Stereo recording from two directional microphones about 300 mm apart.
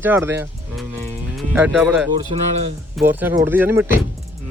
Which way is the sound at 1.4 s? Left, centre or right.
Centre.